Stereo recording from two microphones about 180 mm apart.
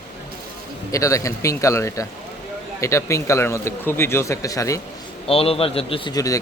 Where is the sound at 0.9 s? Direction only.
20° left (ahead or behind).